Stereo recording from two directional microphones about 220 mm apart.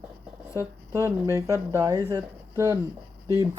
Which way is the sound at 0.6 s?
10° right (ahead or behind).